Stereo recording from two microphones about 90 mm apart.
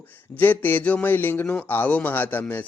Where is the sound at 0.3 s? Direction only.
20° left (ahead or behind).